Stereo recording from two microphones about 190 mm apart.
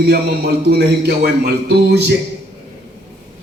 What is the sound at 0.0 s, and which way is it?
A man's voice, 60° right (ahead or behind).